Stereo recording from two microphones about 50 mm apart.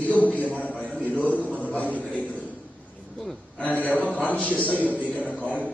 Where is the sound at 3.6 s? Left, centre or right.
Left.